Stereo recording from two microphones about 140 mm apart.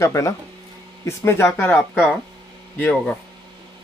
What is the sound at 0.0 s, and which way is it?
Speech, 20° left (ahead or behind).